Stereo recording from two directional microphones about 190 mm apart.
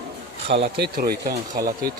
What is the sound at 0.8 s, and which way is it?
Speech, 55° right (ahead or behind).